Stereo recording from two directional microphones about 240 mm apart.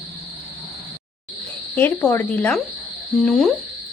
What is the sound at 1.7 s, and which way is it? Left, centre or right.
Speech, centre.